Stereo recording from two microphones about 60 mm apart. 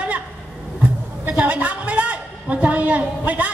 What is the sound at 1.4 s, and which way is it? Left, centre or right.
A woman's voice, right.